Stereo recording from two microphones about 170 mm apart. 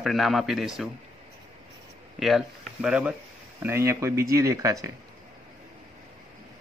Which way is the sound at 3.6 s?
15° right (ahead or behind).